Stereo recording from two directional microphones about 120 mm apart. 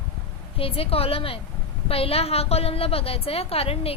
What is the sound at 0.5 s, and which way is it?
A woman's voice, 50° left (ahead or behind).